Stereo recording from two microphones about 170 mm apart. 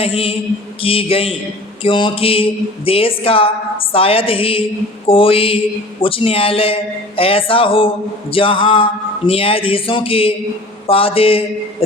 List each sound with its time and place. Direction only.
0.0 s speech: 35° left (ahead or behind)